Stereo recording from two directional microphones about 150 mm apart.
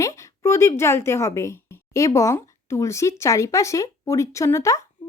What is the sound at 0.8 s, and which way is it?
A woman's voice, 15° left (ahead or behind).